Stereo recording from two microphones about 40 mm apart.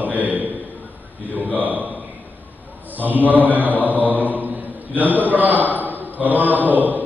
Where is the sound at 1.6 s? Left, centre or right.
Right.